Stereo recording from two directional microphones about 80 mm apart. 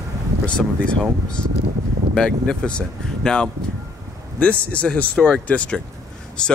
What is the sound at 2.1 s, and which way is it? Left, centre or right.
Speech, centre.